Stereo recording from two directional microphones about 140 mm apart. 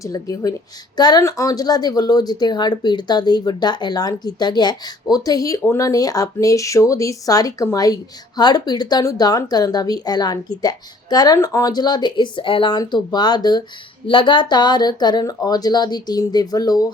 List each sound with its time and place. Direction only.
0.0 s speech: 25° left (ahead or behind)